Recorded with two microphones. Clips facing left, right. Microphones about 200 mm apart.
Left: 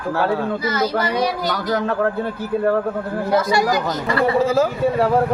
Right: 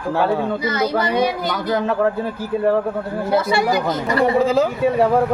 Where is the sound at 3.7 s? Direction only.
20° right (ahead or behind).